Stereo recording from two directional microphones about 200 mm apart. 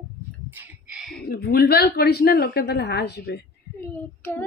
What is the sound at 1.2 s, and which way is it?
A woman's voice, 50° left (ahead or behind).